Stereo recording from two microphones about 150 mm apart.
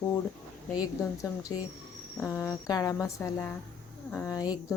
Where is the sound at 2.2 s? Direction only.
20° left (ahead or behind).